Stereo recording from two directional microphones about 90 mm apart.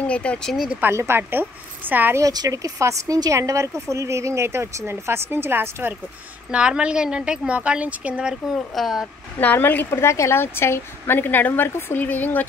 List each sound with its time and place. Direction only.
0.0 s speech: 15° left (ahead or behind)
0.7 s speech: 20° right (ahead or behind)
2.1 s speech: 40° right (ahead or behind); by 5.9 s 25° right (ahead or behind)
6.5 s a woman's voice: 10° right (ahead or behind)
8.5 s speech: centre (ahead or behind)
9.4 s a woman's voice: 20° left (ahead or behind)